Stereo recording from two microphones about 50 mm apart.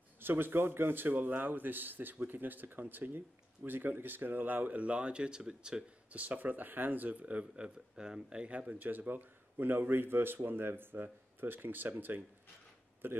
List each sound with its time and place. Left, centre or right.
0.2 s speech: right; by 5.9 s centre
6.1 s speech: right